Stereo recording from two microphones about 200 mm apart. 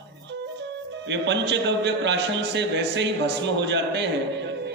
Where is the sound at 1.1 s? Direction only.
60° right (ahead or behind).